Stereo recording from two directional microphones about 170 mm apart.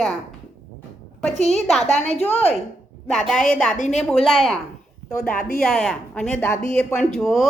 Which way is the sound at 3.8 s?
45° left (ahead or behind).